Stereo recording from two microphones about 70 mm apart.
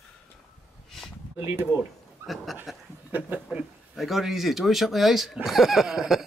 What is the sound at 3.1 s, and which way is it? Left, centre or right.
Speech, right.